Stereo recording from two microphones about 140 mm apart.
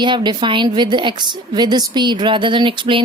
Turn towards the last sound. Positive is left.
turn(degrees=-35)  # may be behind; listen again after turning